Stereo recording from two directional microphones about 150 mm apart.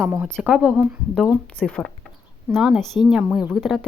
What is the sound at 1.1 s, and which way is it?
Speech, 5° left (ahead or behind).